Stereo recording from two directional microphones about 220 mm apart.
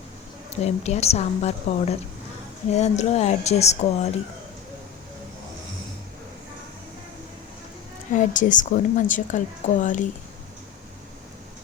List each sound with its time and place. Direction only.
0.6 s speech: 30° left (ahead or behind)
8.1 s a woman's voice: 35° left (ahead or behind)